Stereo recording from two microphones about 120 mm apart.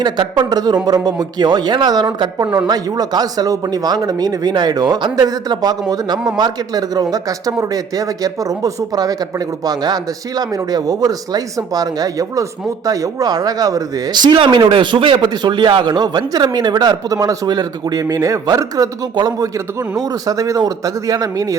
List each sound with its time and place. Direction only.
0.0 s speech: 40° right (ahead or behind)